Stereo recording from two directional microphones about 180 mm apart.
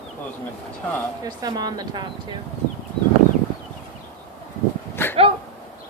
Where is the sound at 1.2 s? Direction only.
20° right (ahead or behind).